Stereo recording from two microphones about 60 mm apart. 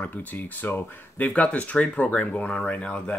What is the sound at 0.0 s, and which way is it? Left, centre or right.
Speech, left.